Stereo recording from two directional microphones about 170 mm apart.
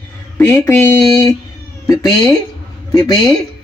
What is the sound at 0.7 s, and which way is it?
Speech, 15° left (ahead or behind).